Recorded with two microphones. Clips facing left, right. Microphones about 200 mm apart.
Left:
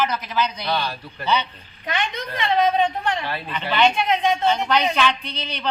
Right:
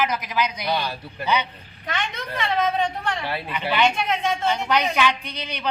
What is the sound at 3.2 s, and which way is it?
A man's voice, 10° right (ahead or behind).